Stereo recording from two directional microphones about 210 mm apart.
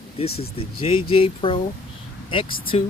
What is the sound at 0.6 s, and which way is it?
Speech, 25° left (ahead or behind).